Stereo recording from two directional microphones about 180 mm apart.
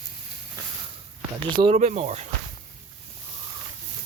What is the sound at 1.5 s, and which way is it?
Speech, 30° right (ahead or behind).